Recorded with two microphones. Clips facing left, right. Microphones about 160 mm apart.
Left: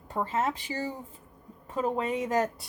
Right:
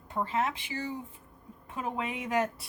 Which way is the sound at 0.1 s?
40° left (ahead or behind).